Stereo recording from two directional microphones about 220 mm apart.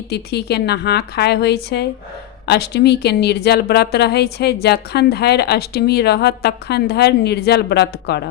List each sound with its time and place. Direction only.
0.1 s a woman's voice: 50° left (ahead or behind)